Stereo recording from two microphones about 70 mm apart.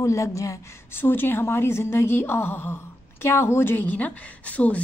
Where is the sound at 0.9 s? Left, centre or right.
Left.